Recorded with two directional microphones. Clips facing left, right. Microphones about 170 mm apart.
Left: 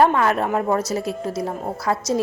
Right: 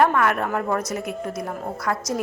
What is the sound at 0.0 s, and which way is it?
A woman's voice, 25° left (ahead or behind).